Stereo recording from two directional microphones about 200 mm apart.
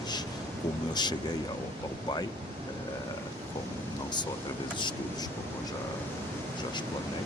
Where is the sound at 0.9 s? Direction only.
20° left (ahead or behind).